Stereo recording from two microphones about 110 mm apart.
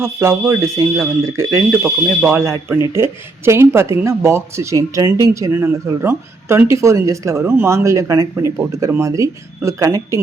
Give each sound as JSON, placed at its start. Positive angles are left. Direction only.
{"t": 0.0, "sound": "speech", "side_deg": -25}